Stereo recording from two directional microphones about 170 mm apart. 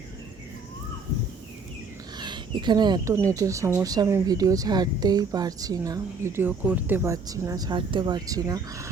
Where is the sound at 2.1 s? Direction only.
25° right (ahead or behind).